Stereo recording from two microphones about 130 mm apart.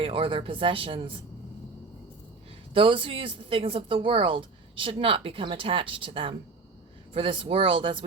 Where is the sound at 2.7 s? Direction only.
40° right (ahead or behind).